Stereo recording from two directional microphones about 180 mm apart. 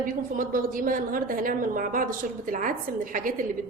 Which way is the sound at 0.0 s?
50° right (ahead or behind).